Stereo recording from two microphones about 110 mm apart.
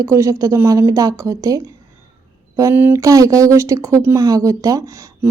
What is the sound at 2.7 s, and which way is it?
Mantra, 20° right (ahead or behind).